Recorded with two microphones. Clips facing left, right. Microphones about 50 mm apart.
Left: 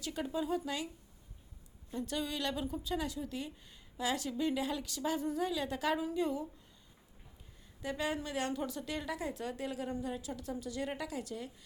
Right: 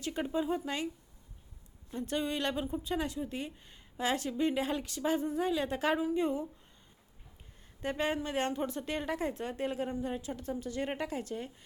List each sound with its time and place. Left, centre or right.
0.0 s speech: right
2.0 s a woman's voice: right
7.8 s a woman's voice: right